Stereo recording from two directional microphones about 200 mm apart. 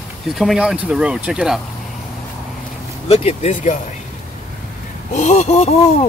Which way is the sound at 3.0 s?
30° left (ahead or behind).